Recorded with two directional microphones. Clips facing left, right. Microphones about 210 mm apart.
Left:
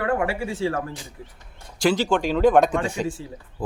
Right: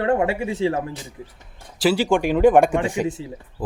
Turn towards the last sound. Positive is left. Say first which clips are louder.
# right 3 dB
turn(degrees=-20)  # may be behind; listen again after turning